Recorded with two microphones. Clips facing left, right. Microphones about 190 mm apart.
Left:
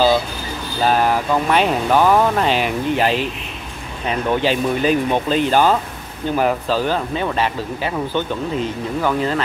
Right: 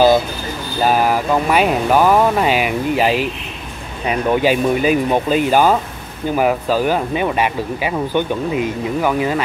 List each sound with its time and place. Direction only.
0.8 s speech: 10° right (ahead or behind)